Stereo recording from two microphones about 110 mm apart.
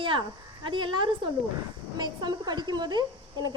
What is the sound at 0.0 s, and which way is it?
A woman's voice, 50° right (ahead or behind).